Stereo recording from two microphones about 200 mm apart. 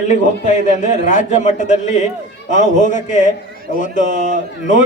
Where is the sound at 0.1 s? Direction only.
35° left (ahead or behind).